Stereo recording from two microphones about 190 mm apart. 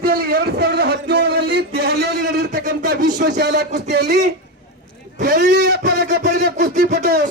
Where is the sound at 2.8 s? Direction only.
60° right (ahead or behind).